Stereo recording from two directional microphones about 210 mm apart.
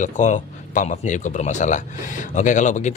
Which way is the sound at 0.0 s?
35° left (ahead or behind).